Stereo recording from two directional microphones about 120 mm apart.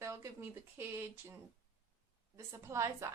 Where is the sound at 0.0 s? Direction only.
20° right (ahead or behind).